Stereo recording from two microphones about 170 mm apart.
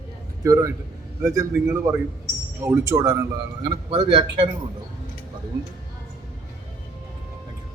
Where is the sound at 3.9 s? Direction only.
30° right (ahead or behind).